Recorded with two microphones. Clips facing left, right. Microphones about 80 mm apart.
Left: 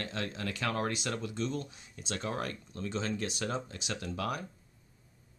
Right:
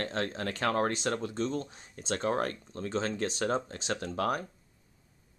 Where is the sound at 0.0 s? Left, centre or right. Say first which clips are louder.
Right 4 dB; right.